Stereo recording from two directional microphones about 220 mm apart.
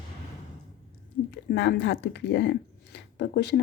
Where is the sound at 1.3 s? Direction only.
55° left (ahead or behind).